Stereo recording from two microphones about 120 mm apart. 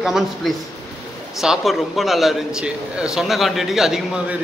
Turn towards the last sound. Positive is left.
turn(degrees=-5)  # may be behind; listen again after turning